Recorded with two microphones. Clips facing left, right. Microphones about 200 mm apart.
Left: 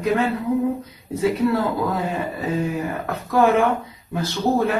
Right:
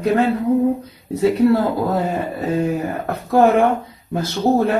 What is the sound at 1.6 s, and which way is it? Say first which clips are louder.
Speech: right 4 dB; 40° right (ahead or behind).